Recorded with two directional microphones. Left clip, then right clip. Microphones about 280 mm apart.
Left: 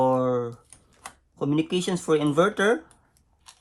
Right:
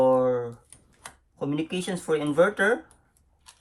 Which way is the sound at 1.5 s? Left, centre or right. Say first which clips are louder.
Left 5 dB; centre.